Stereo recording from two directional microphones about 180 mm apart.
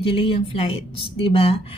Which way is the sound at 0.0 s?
30° left (ahead or behind).